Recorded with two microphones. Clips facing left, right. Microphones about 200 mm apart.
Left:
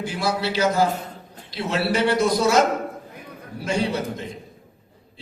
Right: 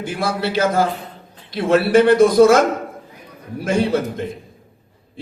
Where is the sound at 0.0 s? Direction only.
50° right (ahead or behind).